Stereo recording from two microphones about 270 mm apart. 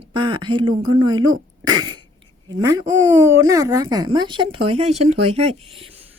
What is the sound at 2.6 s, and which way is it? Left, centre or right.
Speech, centre.